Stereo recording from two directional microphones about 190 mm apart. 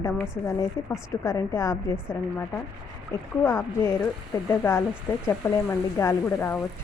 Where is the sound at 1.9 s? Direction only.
5° right (ahead or behind).